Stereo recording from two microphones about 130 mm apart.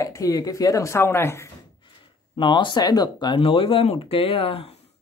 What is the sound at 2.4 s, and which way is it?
Speech, 40° left (ahead or behind).